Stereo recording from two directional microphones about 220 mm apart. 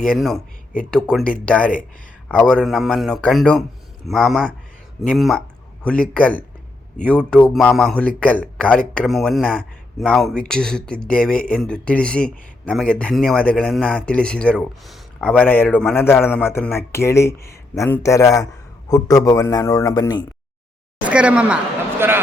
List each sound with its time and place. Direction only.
0.2 s a man's voice: centre (ahead or behind); by 20.2 s 20° left (ahead or behind)
21.0 s speech: 5° right (ahead or behind)